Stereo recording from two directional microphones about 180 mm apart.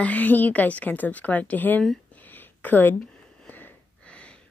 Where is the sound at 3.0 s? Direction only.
10° left (ahead or behind).